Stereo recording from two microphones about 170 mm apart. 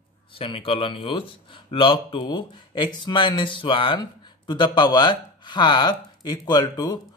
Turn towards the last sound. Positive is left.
turn(degrees=25)  # may be behind; listen again after turning